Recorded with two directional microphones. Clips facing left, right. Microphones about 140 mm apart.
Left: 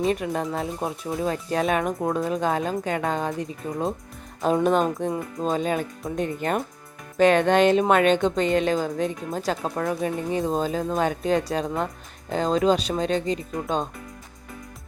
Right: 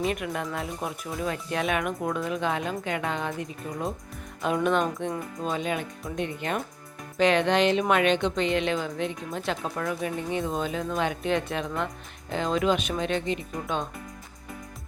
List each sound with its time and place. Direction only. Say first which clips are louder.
0.0 s speech: left 5 dB; 35° left (ahead or behind)